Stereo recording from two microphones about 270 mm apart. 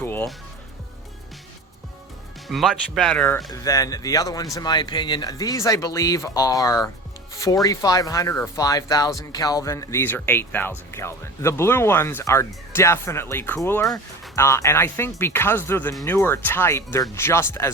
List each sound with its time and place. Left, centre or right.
0.0 s music: centre
2.5 s speech: centre